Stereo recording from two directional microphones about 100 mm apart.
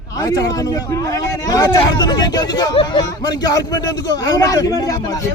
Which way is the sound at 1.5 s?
40° left (ahead or behind).